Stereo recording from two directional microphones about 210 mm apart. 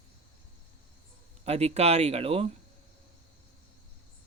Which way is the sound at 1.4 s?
30° right (ahead or behind).